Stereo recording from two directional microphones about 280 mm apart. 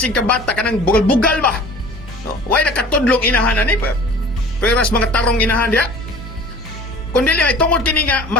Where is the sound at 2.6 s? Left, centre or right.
Centre.